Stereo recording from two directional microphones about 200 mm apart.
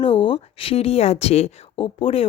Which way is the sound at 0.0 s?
25° left (ahead or behind).